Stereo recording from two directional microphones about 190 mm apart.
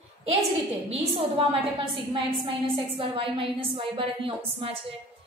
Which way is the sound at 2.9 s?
30° right (ahead or behind).